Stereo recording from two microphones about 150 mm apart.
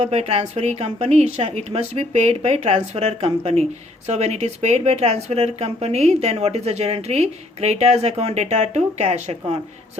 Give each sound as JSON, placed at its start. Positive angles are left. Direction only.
{"t": 0.0, "sound": "speech", "side_deg": -45}